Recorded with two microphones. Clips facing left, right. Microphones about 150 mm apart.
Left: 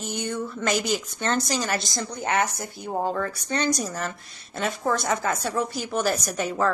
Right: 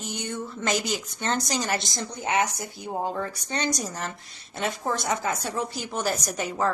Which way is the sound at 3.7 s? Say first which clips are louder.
Left 3 dB; 50° left (ahead or behind).